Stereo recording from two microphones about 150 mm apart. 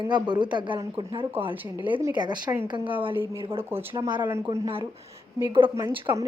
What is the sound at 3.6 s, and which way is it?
Speech, 15° right (ahead or behind).